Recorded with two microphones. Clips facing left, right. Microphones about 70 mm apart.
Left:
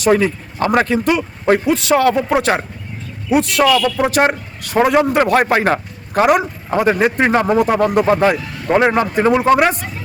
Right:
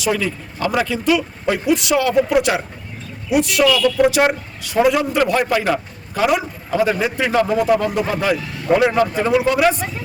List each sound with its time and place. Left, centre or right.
0.0 s speech: left
4.6 s a man's voice: left